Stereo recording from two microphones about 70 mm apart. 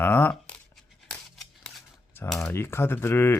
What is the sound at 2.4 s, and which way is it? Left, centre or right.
Speech, left.